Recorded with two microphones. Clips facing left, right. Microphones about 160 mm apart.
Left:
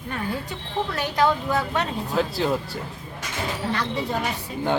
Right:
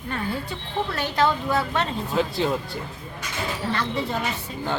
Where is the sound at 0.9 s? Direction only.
15° left (ahead or behind).